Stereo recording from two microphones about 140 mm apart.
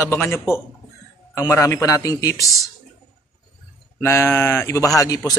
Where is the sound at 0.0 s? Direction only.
15° left (ahead or behind).